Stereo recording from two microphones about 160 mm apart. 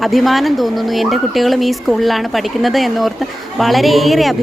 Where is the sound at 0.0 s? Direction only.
Centre (ahead or behind).